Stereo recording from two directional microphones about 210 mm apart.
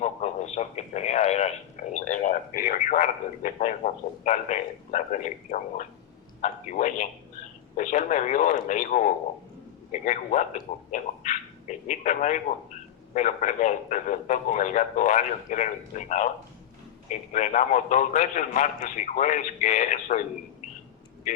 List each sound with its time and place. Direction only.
0.0 s a man's voice: 30° left (ahead or behind)
10.9 s a man's voice: 35° left (ahead or behind)